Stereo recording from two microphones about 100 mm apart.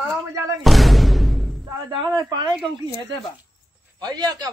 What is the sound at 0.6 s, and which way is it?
Music, centre (ahead or behind).